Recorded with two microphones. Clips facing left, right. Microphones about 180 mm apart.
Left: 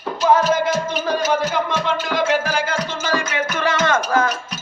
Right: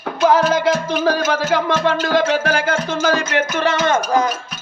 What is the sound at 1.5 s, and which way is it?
Music, 65° right (ahead or behind).